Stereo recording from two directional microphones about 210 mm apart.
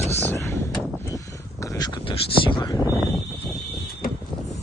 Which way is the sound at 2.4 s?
20° left (ahead or behind).